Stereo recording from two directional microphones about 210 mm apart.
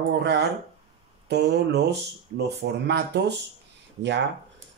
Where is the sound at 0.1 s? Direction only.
55° right (ahead or behind).